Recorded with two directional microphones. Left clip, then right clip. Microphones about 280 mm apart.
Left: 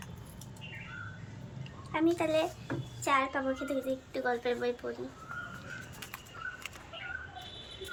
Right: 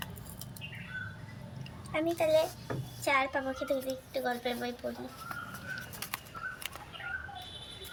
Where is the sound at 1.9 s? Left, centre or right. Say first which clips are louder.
Right 1 dB; centre.